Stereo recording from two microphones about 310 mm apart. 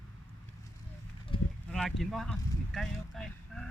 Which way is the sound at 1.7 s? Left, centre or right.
Centre.